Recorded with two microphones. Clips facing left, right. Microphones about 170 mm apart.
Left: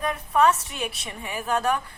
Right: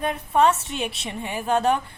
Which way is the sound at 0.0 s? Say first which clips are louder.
Right 1 dB; 30° right (ahead or behind).